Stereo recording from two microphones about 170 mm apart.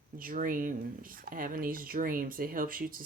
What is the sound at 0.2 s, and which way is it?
Speech, 55° right (ahead or behind).